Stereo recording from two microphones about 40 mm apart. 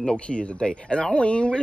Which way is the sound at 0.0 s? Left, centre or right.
Left.